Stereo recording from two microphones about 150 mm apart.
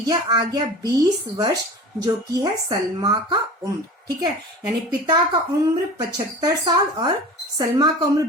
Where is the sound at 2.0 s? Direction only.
25° right (ahead or behind).